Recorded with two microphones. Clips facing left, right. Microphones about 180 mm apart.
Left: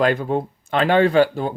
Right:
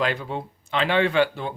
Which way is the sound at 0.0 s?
45° left (ahead or behind).